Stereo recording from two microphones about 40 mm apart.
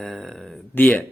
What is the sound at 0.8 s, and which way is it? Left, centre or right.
Speech, left.